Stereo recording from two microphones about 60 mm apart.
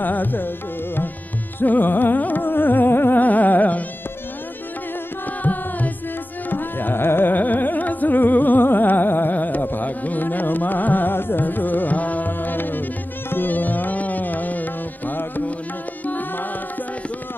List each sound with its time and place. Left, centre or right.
0.0 s carnatic music: left
1.6 s carnatic music: left
5.4 s music: left
6.5 s carnatic music: left
13.3 s music: left